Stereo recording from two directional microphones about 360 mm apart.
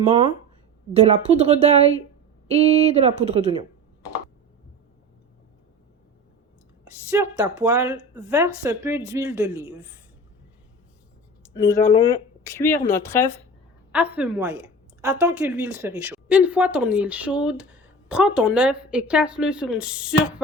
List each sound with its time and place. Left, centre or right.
0.9 s a woman's voice: centre
7.2 s speech: centre
11.5 s speech: centre
13.9 s speech: centre